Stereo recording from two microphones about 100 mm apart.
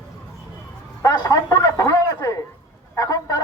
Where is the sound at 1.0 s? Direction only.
30° left (ahead or behind).